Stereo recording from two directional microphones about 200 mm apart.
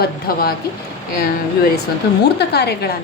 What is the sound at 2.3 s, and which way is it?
Speech, 55° left (ahead or behind).